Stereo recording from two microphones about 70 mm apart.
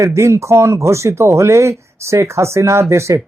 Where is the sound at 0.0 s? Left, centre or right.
Right.